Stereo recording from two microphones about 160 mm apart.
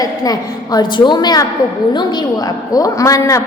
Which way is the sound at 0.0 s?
25° left (ahead or behind).